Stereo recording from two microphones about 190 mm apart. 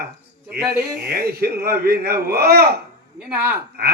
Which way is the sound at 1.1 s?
55° right (ahead or behind).